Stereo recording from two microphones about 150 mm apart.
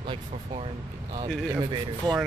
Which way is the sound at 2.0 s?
30° right (ahead or behind).